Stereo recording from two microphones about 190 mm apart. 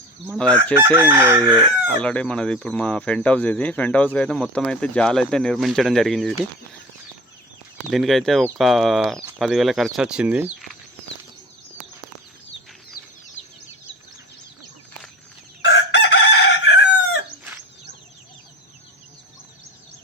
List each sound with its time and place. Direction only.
0.3 s speech: 5° left (ahead or behind)
0.7 s chicken: 10° right (ahead or behind)
1.8 s speech: 5° left (ahead or behind)
7.9 s speech: centre (ahead or behind)
15.6 s chicken: 70° left (ahead or behind)